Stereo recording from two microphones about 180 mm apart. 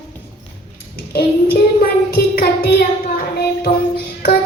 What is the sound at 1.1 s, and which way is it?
Child singing, 60° left (ahead or behind).